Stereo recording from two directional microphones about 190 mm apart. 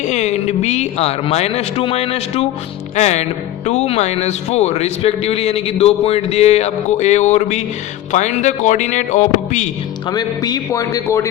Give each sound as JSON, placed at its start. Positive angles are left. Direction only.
{"t": 0.1, "sound": "a man's voice", "side_deg": 35}
{"t": 10.1, "sound": "a man's voice", "side_deg": 20}